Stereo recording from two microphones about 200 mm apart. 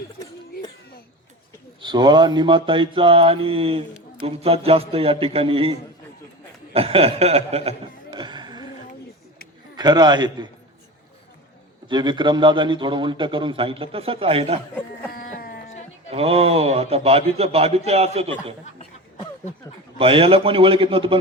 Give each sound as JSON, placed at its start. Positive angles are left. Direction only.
{"t": 1.8, "sound": "a man's voice", "side_deg": -20}
{"t": 6.7, "sound": "chuckle", "side_deg": -30}
{"t": 9.7, "sound": "a man's voice", "side_deg": -20}
{"t": 11.9, "sound": "a man's voice", "side_deg": -20}
{"t": 15.1, "sound": "a sound", "side_deg": 45}
{"t": 16.0, "sound": "a man's voice", "side_deg": -30}
{"t": 18.8, "sound": "a sound", "side_deg": 20}
{"t": 20.0, "sound": "a man's voice", "side_deg": -30}